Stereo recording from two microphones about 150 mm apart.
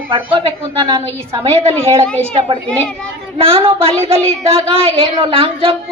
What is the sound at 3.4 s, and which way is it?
A woman's voice, 40° right (ahead or behind).